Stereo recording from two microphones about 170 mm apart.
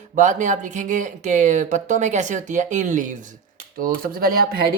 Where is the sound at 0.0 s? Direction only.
45° right (ahead or behind).